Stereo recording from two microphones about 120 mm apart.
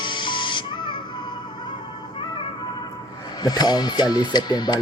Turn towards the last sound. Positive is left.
turn(degrees=35)  # may be behind; listen again after turning